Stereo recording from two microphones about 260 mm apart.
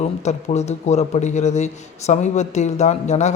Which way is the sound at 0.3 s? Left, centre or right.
Left.